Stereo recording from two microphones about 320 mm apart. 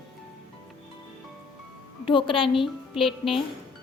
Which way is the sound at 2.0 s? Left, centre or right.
Centre.